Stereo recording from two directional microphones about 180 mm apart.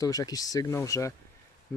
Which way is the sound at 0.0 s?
20° left (ahead or behind).